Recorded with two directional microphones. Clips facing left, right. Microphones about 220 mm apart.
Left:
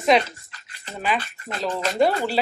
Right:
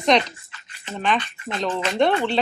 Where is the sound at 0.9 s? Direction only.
5° left (ahead or behind).